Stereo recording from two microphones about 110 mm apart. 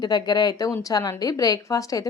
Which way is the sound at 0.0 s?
40° left (ahead or behind).